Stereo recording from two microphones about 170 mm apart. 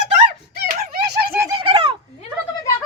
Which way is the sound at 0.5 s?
60° right (ahead or behind).